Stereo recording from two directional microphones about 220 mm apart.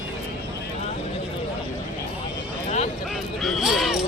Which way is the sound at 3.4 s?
Centre (ahead or behind).